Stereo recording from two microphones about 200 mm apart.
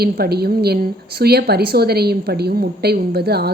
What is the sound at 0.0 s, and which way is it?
A woman's voice, 50° right (ahead or behind).